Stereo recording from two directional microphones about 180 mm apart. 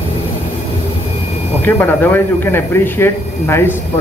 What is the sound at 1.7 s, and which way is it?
Speech, 10° left (ahead or behind).